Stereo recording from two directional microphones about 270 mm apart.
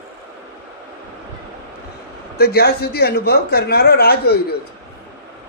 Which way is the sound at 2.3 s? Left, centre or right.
Left.